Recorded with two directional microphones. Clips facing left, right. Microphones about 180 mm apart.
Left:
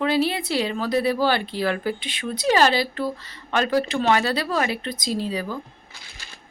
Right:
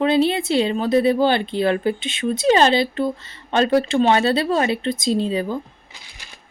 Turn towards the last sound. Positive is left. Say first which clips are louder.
# right 5 dB
turn(degrees=-20)  # may be behind; listen again after turning